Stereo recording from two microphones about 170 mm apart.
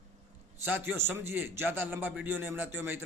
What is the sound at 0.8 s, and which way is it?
A man's voice, 15° right (ahead or behind).